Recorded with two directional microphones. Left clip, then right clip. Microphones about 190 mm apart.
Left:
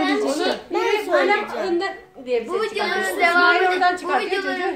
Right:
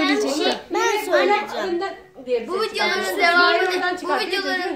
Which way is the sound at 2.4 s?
10° right (ahead or behind).